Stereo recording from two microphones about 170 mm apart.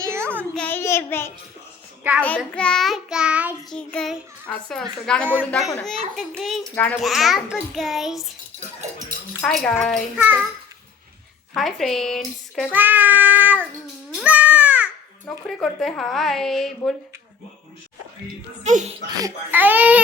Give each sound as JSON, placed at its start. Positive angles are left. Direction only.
{"t": 0.0, "sound": "a sound", "side_deg": -15}
{"t": 0.5, "sound": "child singing", "side_deg": 10}
{"t": 2.6, "sound": "child singing", "side_deg": 5}
{"t": 5.4, "sound": "a child's voice", "side_deg": 10}
{"t": 5.7, "sound": "child singing", "side_deg": 5}
{"t": 8.8, "sound": "speech", "side_deg": -50}
{"t": 9.4, "sound": "child singing", "side_deg": 5}
{"t": 10.2, "sound": "child singing", "side_deg": -10}
{"t": 11.5, "sound": "child singing", "side_deg": 0}
{"t": 12.7, "sound": "child singing", "side_deg": -10}
{"t": 14.2, "sound": "babbling", "side_deg": -10}
{"t": 15.4, "sound": "child singing", "side_deg": 0}
{"t": 18.6, "sound": "speech", "side_deg": -45}
{"t": 19.2, "sound": "child singing", "side_deg": -10}